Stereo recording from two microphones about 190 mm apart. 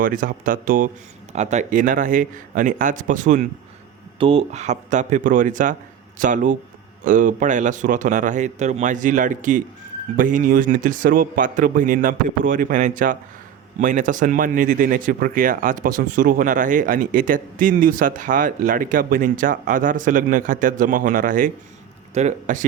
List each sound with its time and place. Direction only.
0.0 s speech: 45° right (ahead or behind)
4.2 s a man's voice: 30° right (ahead or behind)